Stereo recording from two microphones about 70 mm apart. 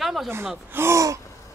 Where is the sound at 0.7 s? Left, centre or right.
Right.